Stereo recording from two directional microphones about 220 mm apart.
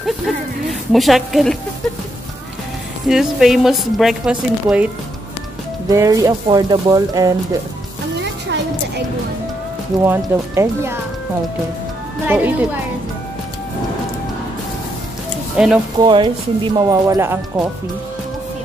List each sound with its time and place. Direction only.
0.7 s a woman's voice: centre (ahead or behind)
3.1 s a woman's voice: centre (ahead or behind)
5.9 s speech: 15° right (ahead or behind)
8.2 s a sound: 50° right (ahead or behind)
10.0 s speech: 10° right (ahead or behind)
12.3 s speech: 10° right (ahead or behind)
15.5 s speech: 5° right (ahead or behind)
16.0 s speech: 20° right (ahead or behind)